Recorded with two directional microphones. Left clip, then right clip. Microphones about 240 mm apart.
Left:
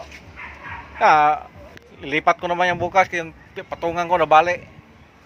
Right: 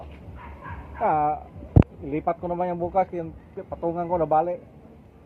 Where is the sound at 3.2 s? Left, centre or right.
Left.